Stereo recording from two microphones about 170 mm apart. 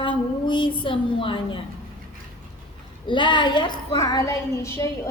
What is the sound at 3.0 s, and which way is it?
Speech, 30° left (ahead or behind).